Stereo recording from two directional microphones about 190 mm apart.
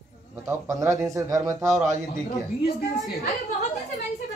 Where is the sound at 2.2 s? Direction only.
55° left (ahead or behind).